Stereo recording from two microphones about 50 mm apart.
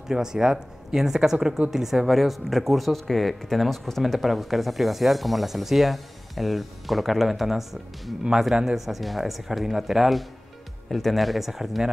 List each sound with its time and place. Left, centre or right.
0.1 s speech: centre